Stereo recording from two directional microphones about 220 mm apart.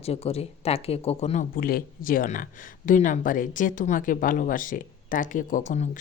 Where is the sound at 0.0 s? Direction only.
25° left (ahead or behind).